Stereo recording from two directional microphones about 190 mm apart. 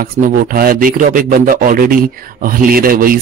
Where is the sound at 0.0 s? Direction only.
50° right (ahead or behind).